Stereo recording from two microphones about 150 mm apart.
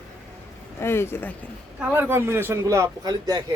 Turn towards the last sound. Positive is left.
turn(degrees=-25)  # may be behind; listen again after turning